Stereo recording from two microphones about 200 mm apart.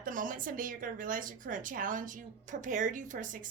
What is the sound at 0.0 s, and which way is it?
A woman's voice, 40° right (ahead or behind).